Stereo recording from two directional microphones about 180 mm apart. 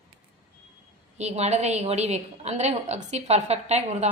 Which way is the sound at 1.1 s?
35° right (ahead or behind).